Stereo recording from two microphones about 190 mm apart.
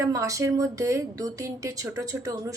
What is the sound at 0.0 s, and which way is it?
Speech, 15° right (ahead or behind).